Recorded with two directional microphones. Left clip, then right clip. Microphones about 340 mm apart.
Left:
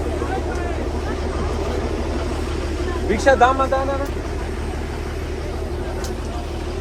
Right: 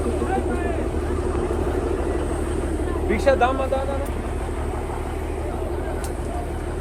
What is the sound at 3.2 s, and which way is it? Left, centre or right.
Speech, left.